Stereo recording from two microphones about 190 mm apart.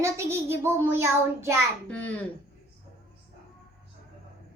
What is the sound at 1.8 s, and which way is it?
Speech, 10° left (ahead or behind).